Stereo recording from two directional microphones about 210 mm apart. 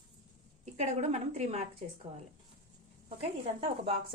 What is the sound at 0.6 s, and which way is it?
A woman's voice, 30° right (ahead or behind).